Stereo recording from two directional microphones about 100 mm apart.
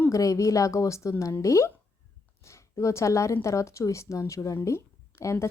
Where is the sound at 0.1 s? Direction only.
35° left (ahead or behind).